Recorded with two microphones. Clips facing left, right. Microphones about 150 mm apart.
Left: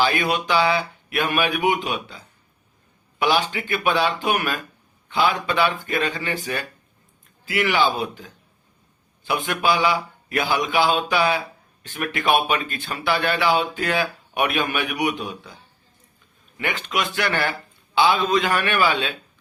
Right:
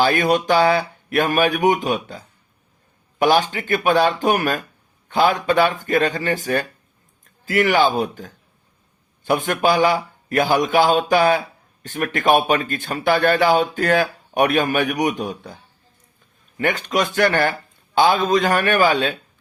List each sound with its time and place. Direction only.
0.0 s speech: 45° right (ahead or behind)
16.6 s speech: 45° right (ahead or behind)